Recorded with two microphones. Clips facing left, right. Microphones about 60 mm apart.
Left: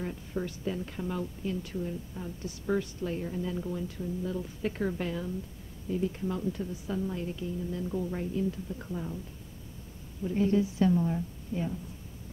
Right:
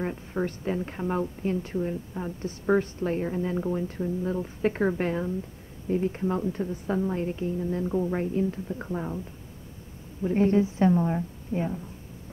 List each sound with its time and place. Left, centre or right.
0.0 s speech: right
10.2 s speech: right